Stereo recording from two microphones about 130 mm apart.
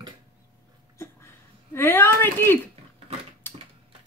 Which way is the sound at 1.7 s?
15° left (ahead or behind).